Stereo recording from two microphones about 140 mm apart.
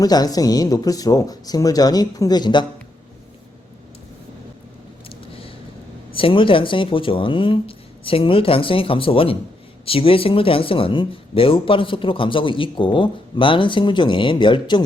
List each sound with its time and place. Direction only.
0.0 s speech: 25° left (ahead or behind)
5.0 s vehicle: 40° left (ahead or behind)
6.1 s speech: 40° left (ahead or behind)